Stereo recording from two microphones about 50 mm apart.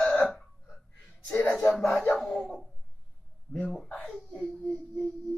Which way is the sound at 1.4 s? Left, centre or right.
Centre.